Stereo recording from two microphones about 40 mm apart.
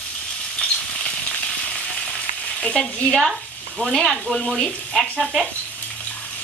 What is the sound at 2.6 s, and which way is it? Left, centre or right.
Stir, centre.